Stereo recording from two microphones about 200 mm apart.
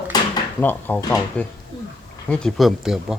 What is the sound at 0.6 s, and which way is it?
Speech, 10° left (ahead or behind).